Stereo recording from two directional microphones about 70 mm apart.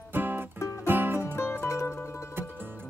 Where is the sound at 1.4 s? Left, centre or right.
Left.